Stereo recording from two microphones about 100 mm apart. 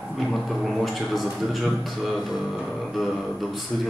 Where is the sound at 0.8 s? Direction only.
Centre (ahead or behind).